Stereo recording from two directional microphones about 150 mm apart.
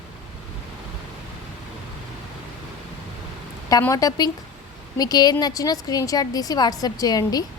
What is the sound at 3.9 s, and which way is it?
A woman's voice, 25° left (ahead or behind).